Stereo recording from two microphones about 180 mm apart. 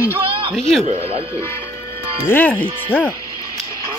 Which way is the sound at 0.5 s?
5° left (ahead or behind).